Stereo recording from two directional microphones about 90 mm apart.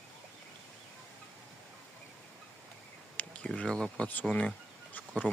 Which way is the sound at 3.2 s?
15° left (ahead or behind).